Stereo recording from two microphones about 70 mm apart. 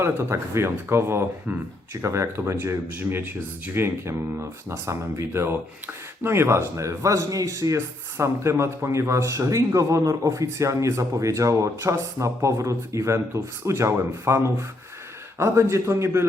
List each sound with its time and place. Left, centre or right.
0.0 s speech: right
3.0 s speech: right
3.8 s speech: right